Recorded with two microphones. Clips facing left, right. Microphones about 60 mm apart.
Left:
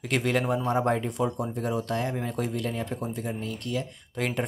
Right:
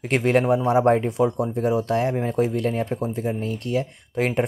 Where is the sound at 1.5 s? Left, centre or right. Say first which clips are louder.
Right 9 dB; right.